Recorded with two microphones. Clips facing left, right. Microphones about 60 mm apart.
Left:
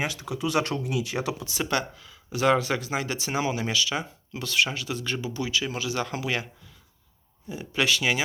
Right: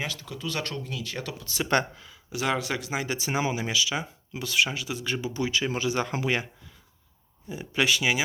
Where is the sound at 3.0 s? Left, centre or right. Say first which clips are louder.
Even; centre.